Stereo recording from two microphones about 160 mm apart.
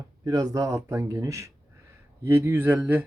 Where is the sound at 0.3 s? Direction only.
20° right (ahead or behind).